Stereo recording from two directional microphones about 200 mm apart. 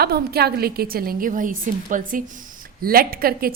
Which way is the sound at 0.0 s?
50° right (ahead or behind).